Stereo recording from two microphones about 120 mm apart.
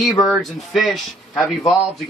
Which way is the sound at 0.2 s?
Centre (ahead or behind).